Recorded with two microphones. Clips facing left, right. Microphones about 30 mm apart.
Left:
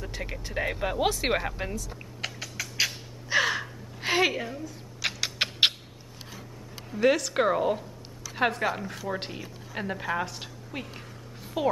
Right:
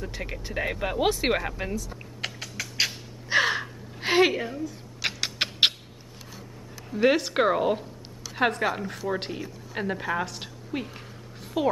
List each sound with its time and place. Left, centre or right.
0.0 s speech: centre
1.7 s typing: centre
3.6 s a sound: centre
5.0 s rodents: centre
6.9 s a woman's voice: centre